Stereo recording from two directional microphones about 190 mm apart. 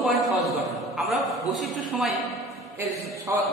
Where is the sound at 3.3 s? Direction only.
15° right (ahead or behind).